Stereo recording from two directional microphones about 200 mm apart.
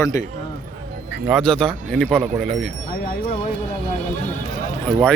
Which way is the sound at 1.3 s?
5° left (ahead or behind).